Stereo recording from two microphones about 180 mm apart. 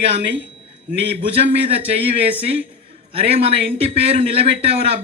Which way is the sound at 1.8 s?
35° right (ahead or behind).